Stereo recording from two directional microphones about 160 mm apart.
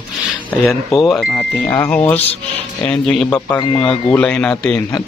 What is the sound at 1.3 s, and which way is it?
Speech, 10° left (ahead or behind).